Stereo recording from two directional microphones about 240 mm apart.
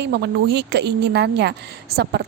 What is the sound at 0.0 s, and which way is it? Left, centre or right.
A woman's voice, right.